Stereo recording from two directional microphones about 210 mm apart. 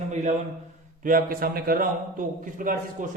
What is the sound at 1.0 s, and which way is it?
A man's voice, 40° right (ahead or behind).